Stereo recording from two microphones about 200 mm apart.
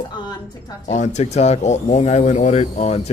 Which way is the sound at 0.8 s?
35° left (ahead or behind).